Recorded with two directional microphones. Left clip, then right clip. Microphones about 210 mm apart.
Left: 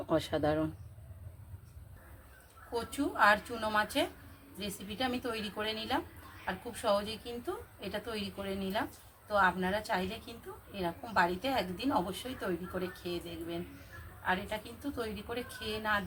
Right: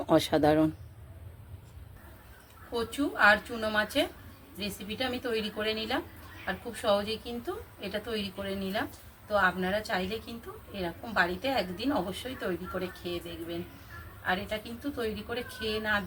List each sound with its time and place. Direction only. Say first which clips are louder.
0.0 s speech: right 7 dB; 35° right (ahead or behind)
2.7 s a woman's voice: right 2 dB; 5° left (ahead or behind)